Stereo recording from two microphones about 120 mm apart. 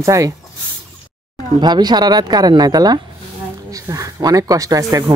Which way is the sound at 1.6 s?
35° right (ahead or behind).